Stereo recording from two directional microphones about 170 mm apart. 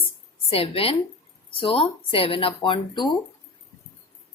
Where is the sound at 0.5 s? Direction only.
35° left (ahead or behind).